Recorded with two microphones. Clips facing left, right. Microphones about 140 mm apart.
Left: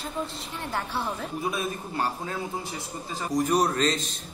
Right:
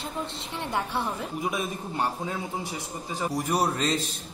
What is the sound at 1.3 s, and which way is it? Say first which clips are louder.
Speech: left 1 dB; 15° right (ahead or behind).